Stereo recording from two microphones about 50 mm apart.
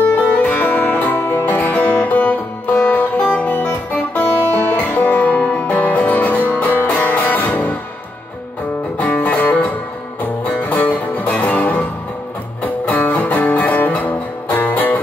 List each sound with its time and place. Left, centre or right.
0.0 s music: left
8.9 s music: left
12.8 s music: left